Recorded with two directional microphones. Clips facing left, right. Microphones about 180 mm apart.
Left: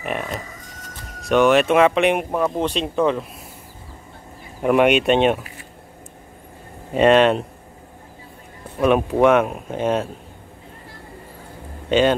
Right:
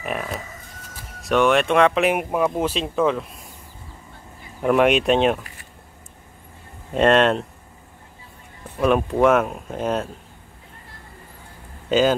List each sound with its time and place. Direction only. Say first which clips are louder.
0.0 s speech: left 1 dB; centre (ahead or behind)
4.6 s speech: left 1 dB; 5° left (ahead or behind)
6.9 s speech: left 2 dB; centre (ahead or behind)
8.7 s speech: left 2 dB; 5° left (ahead or behind)
11.9 s speech: left 1 dB; centre (ahead or behind)